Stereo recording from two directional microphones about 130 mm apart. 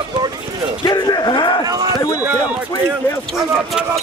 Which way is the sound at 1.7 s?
30° right (ahead or behind).